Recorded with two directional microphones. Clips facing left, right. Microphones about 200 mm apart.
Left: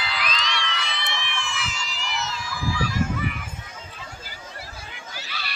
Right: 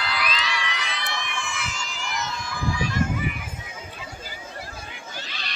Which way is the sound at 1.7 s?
5° left (ahead or behind).